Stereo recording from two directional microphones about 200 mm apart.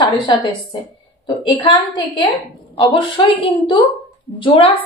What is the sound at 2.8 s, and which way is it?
Speech, 25° left (ahead or behind).